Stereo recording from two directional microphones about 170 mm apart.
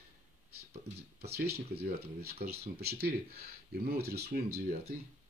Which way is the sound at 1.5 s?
70° right (ahead or behind).